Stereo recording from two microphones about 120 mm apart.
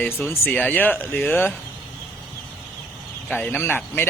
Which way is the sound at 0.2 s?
20° left (ahead or behind).